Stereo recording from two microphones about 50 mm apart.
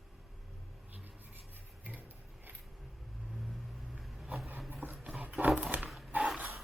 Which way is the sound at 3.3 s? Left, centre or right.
Centre.